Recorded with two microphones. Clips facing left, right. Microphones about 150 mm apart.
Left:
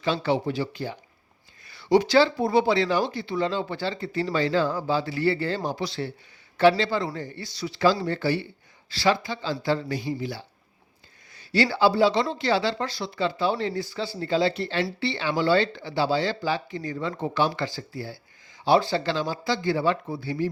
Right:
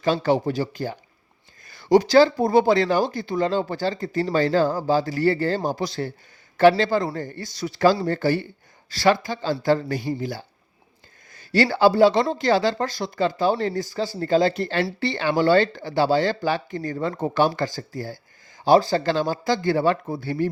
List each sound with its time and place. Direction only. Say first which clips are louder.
0.0 s speech: right 4 dB; 45° right (ahead or behind)